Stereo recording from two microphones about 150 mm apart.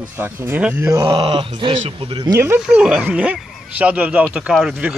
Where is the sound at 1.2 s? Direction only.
35° right (ahead or behind).